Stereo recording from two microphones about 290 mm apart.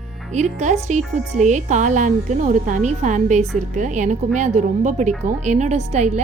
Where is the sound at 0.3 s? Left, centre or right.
Right.